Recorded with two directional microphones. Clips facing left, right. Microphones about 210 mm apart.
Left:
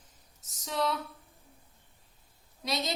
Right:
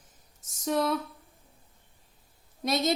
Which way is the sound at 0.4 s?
50° right (ahead or behind).